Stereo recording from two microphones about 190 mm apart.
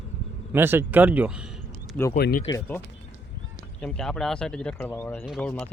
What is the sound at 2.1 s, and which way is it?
Speech, 55° left (ahead or behind).